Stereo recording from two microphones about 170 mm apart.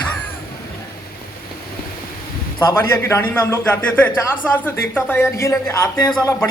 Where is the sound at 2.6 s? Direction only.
15° left (ahead or behind).